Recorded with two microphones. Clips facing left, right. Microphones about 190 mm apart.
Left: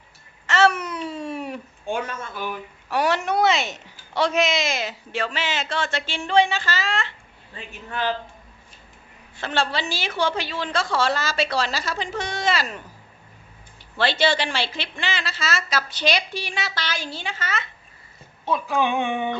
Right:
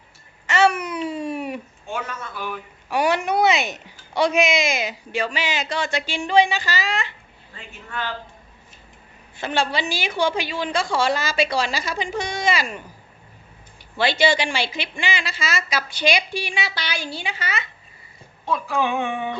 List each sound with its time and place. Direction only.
0.4 s babbling: 15° right (ahead or behind)
2.9 s a woman's voice: 15° right (ahead or behind)
7.5 s a man's voice: 20° left (ahead or behind)
9.4 s a woman's voice: 15° right (ahead or behind)
13.9 s a woman's voice: 10° right (ahead or behind)
18.4 s a woman's voice: centre (ahead or behind)